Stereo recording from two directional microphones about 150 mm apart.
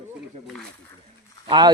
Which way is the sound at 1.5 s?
30° right (ahead or behind).